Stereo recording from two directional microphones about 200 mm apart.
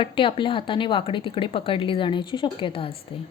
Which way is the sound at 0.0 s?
25° left (ahead or behind).